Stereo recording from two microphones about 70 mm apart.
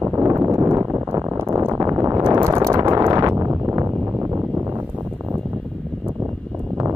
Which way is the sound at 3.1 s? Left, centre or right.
Right.